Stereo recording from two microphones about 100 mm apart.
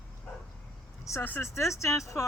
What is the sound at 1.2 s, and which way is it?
Speech, 20° left (ahead or behind).